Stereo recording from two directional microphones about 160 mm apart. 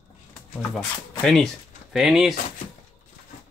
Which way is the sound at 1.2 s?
5° left (ahead or behind).